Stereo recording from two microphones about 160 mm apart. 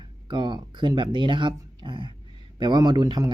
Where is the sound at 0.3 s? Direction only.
30° right (ahead or behind).